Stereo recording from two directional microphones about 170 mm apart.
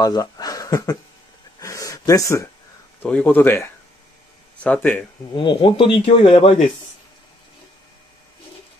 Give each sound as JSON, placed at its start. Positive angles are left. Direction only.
{"t": 0.0, "sound": "a sound", "side_deg": 20}
{"t": 3.0, "sound": "speech", "side_deg": 10}
{"t": 5.3, "sound": "speech", "side_deg": 30}